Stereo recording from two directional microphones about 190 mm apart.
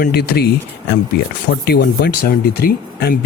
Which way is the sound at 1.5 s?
55° left (ahead or behind).